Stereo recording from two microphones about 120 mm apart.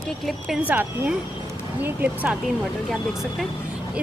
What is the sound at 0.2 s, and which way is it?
Speech, centre (ahead or behind).